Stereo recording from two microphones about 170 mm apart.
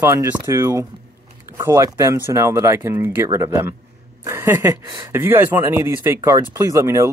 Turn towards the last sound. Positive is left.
turn(degrees=-15)  # may be behind; listen again after turning